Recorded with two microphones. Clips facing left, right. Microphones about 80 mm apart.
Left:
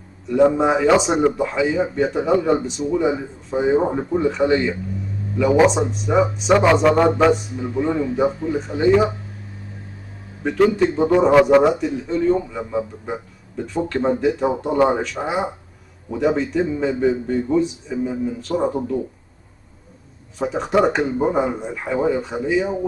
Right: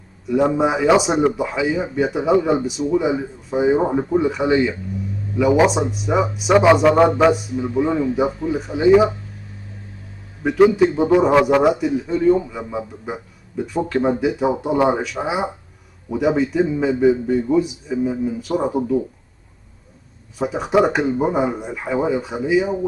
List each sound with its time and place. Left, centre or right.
0.3 s speech: centre
10.4 s a man's voice: centre
20.3 s speech: centre